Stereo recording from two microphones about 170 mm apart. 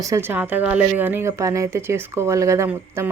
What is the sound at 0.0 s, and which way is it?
A woman's voice, 15° right (ahead or behind).